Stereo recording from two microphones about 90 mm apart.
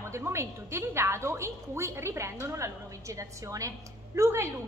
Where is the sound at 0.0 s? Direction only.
30° right (ahead or behind).